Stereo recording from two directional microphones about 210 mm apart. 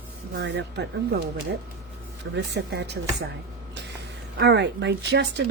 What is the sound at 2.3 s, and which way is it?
Speech, 55° right (ahead or behind).